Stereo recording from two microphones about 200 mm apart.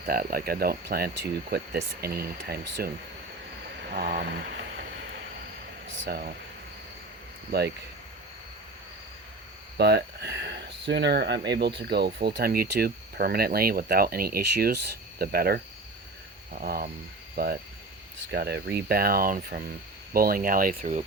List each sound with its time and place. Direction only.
0.0 s speech: 45° right (ahead or behind)
3.9 s speech: 50° right (ahead or behind)
5.9 s speech: 70° right (ahead or behind)
7.5 s speech: 50° right (ahead or behind)
9.7 s speech: 55° right (ahead or behind); by 21.0 s 40° right (ahead or behind)